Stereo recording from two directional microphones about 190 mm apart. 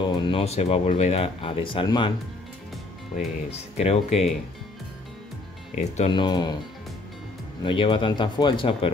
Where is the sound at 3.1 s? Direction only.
35° left (ahead or behind).